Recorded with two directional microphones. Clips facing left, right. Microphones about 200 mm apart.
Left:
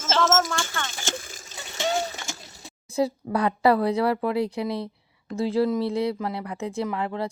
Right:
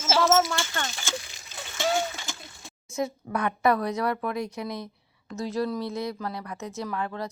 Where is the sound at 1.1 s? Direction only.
50° left (ahead or behind).